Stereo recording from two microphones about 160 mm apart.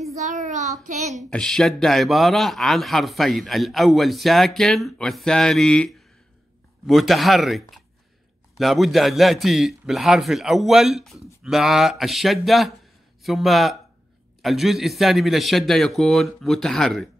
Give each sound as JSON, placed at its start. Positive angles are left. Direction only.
{"t": 0.2, "sound": "child singing", "side_deg": -50}
{"t": 1.1, "sound": "speech", "side_deg": 0}